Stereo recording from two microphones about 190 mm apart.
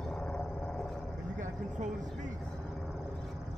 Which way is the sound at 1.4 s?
40° right (ahead or behind).